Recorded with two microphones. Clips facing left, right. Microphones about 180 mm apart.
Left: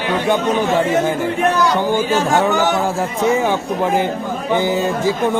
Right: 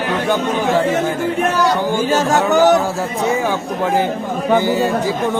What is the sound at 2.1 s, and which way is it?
Speech, 45° right (ahead or behind).